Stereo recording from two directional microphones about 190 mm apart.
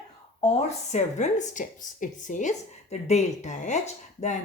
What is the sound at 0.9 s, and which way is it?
Speech, 40° left (ahead or behind).